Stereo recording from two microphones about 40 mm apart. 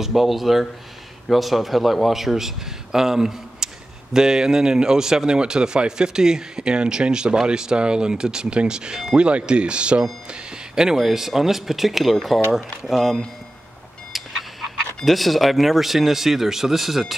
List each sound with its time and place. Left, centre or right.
0.0 s speech: centre; by 10.0 s right
10.3 s speech: centre
14.1 s a sound: centre
15.0 s speech: centre